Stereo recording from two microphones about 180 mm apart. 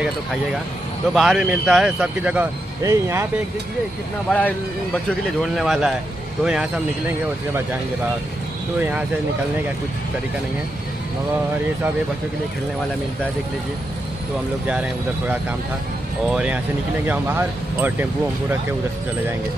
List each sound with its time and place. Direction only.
0.0 s speech: centre (ahead or behind)
4.3 s speech: 10° left (ahead or behind)
5.4 s speech: centre (ahead or behind)
8.7 s speech: 10° right (ahead or behind)
14.7 s speech: 5° right (ahead or behind)